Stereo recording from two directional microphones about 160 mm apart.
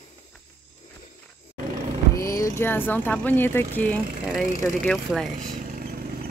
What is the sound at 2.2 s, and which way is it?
Speech, 20° left (ahead or behind).